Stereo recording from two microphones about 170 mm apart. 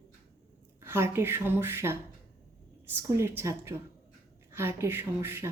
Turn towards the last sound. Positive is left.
turn(degrees=-15)  # may be behind; listen again after turning